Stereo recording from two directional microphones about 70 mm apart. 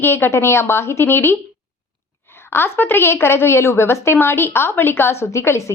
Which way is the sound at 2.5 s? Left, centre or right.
Left.